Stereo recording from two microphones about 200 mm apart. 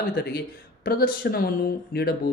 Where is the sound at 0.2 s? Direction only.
55° left (ahead or behind).